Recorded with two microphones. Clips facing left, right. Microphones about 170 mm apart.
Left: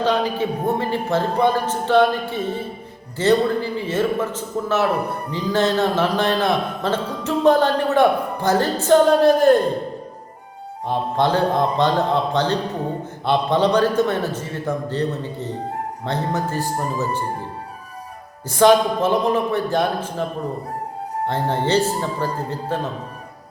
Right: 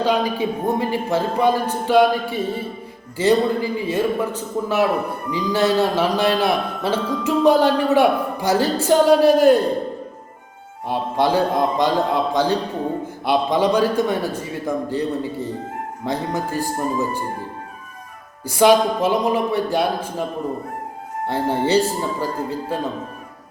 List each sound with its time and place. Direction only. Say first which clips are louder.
0.0 s a man's voice: even; 15° right (ahead or behind)
10.8 s a man's voice: even; 10° right (ahead or behind)
18.4 s a man's voice: even; 10° right (ahead or behind)
21.2 s a man's voice: right 2 dB; 10° right (ahead or behind)